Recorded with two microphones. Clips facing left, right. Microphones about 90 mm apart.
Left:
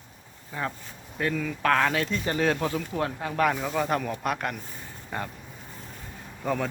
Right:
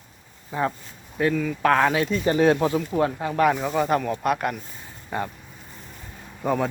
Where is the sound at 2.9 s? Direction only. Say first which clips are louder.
Right 6 dB; 5° right (ahead or behind).